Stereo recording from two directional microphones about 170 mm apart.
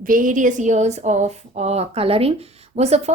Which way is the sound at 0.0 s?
55° right (ahead or behind).